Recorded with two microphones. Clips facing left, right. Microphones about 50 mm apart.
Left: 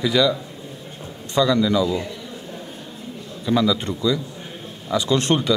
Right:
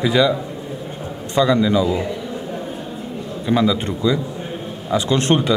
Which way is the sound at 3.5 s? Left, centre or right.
Right.